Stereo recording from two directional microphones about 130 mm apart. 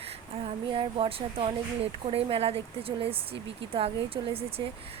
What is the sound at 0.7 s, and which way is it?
A woman's voice, 45° right (ahead or behind).